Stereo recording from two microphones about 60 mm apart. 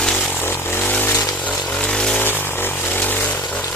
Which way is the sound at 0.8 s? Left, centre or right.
Left.